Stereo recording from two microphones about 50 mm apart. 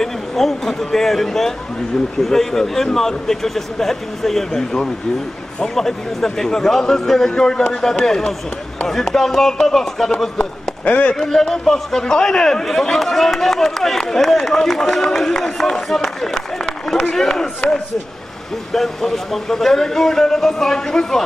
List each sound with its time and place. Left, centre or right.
0.0 s a man's voice: centre
10.3 s a man's voice: left
11.1 s a man's voice: centre